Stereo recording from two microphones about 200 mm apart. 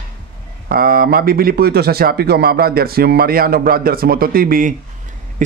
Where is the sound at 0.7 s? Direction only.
45° right (ahead or behind).